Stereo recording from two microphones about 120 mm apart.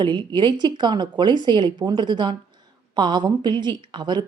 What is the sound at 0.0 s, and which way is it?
A woman's voice, 40° right (ahead or behind).